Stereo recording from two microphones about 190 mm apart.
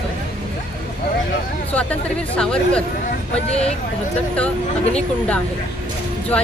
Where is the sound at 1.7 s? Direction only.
5° left (ahead or behind).